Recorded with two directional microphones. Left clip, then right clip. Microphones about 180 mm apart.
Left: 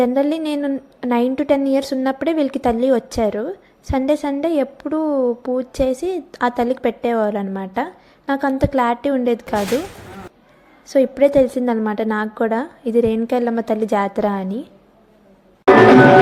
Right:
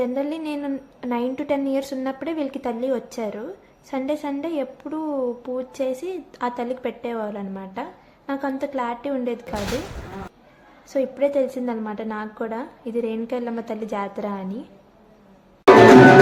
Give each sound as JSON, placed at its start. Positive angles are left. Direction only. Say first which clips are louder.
{"t": 0.0, "sound": "a woman's voice", "louder": "left 8 dB", "side_deg": 35}
{"t": 10.8, "sound": "a woman's voice", "louder": "left 7 dB", "side_deg": 35}